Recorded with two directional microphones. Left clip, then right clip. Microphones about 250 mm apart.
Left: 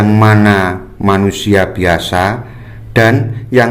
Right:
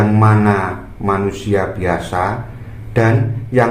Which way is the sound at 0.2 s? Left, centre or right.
Left.